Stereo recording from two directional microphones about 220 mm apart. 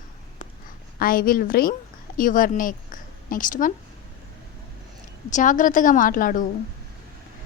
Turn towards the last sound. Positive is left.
turn(degrees=40)  # may be behind; listen again after turning